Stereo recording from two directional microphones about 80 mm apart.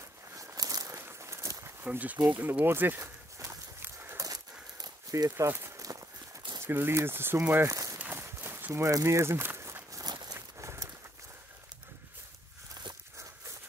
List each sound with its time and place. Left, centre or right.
0.4 s a sound: right
0.9 s walk: right
1.9 s speech: centre
3.0 s walk: right
3.8 s a sound: right
4.2 s a sound: right
5.3 s speech: right
5.8 s horse: right
6.6 s speech: right
7.7 s walk: right
8.0 s run: right
8.9 s a sound: right
10.0 s walk: right
10.6 s horse: right